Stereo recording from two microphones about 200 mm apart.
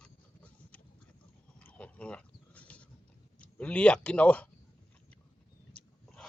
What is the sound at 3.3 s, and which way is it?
Speech, 5° left (ahead or behind).